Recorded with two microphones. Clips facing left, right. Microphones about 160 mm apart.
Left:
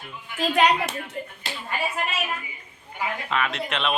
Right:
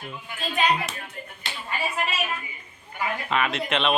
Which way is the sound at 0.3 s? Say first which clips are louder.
Left 4 dB; 80° left.